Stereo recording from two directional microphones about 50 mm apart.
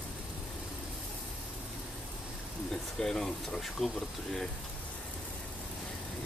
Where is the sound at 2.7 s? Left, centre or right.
Centre.